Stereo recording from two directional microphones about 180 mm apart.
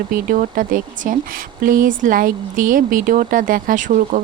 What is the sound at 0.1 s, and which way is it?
Speech, 50° right (ahead or behind).